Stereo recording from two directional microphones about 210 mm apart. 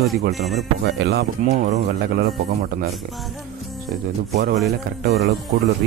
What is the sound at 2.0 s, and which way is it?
Speech, 50° right (ahead or behind).